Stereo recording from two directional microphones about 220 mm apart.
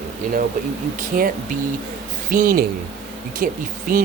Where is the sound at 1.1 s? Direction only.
35° right (ahead or behind).